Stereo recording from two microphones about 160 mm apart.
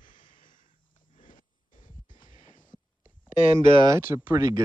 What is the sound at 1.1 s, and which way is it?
Wheeze, 55° left (ahead or behind).